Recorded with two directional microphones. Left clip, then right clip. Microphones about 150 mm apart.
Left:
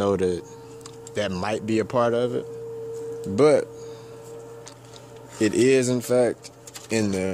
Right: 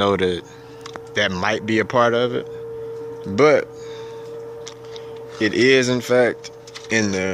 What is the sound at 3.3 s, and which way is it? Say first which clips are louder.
Music: right 3 dB; 15° left (ahead or behind).